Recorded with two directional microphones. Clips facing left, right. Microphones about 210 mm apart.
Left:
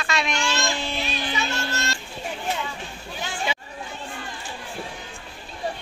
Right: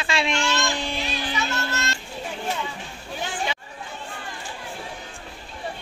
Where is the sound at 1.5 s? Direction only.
30° left (ahead or behind).